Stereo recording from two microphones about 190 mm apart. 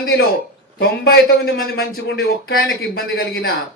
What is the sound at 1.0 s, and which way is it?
Speech, 65° left (ahead or behind).